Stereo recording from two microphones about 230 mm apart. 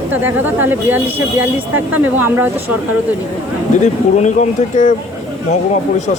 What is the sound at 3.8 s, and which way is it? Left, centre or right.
Speech, left.